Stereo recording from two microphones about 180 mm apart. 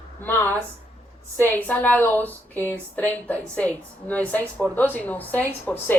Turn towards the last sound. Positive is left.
turn(degrees=10)  # may be behind; listen again after turning